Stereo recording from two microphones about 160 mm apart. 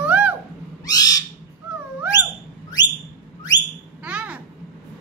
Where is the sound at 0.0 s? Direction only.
10° right (ahead or behind).